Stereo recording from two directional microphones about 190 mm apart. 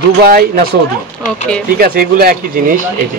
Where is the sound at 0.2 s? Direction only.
50° right (ahead or behind).